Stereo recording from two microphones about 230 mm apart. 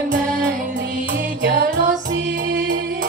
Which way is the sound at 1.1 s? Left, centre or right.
Right.